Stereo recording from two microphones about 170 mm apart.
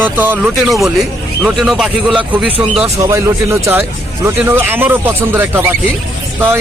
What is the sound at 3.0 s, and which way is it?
Speech, 20° right (ahead or behind).